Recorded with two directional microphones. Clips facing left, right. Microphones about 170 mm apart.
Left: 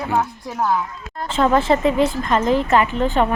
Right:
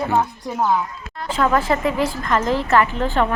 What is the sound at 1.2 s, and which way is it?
A woman's voice, 25° left (ahead or behind).